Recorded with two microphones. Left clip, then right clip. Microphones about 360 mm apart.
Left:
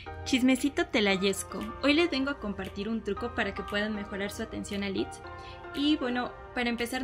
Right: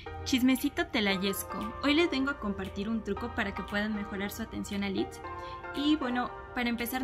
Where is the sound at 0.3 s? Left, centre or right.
Centre.